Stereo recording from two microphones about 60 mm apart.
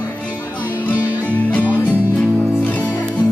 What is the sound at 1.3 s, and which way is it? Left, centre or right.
Music, left.